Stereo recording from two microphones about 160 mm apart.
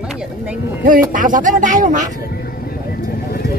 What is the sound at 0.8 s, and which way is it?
Speech, 55° right (ahead or behind).